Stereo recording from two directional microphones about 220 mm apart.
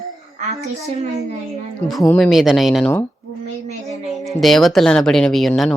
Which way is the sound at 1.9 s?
Centre (ahead or behind).